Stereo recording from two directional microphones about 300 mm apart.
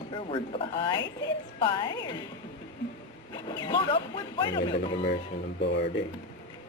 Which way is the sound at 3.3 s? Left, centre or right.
Centre.